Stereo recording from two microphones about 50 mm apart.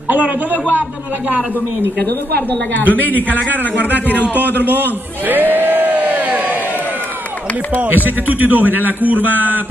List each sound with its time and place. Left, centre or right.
0.1 s a man's voice: right
2.9 s a man's voice: left
4.6 s a sound: right
7.7 s a man's voice: right